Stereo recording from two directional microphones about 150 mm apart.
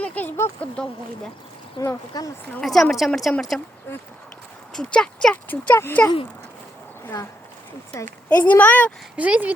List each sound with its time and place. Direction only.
0.0 s speech: 10° left (ahead or behind)
1.8 s speech: 20° left (ahead or behind)
2.6 s a woman's voice: 5° left (ahead or behind)
4.7 s speech: 5° left (ahead or behind)
7.9 s speech: 10° left (ahead or behind)
9.1 s speech: 10° right (ahead or behind)